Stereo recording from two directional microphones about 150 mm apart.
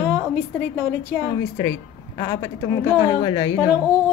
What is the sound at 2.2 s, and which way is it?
Speech, 25° left (ahead or behind).